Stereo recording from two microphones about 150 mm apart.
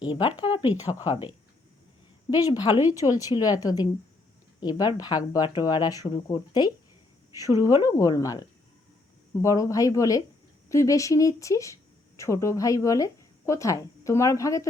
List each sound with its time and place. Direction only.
0.1 s speech: 30° left (ahead or behind)
2.3 s speech: 25° left (ahead or behind)